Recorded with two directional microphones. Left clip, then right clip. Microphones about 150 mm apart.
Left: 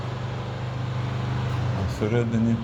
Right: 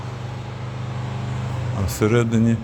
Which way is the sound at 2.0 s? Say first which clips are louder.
Right 7 dB; 75° right (ahead or behind).